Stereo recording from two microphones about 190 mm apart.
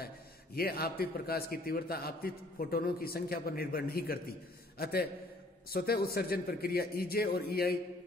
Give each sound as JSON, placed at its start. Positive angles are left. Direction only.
{"t": 0.6, "sound": "a man's voice", "side_deg": 55}